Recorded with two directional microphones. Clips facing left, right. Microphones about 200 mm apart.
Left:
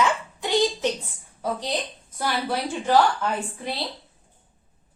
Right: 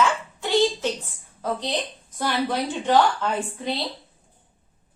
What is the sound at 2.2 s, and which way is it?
Speech, 10° left (ahead or behind).